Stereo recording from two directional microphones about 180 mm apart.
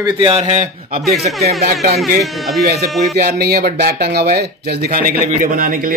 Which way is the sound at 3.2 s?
60° right (ahead or behind).